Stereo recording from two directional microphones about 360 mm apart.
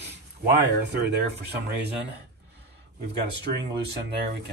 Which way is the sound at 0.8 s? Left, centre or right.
Right.